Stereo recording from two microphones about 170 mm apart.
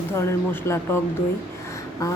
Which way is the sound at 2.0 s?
20° left (ahead or behind).